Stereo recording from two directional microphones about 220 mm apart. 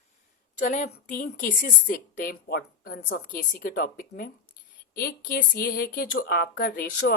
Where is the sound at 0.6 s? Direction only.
35° left (ahead or behind).